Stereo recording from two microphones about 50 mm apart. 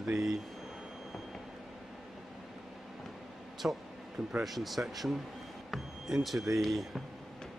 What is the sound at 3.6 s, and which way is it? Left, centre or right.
Speech, right.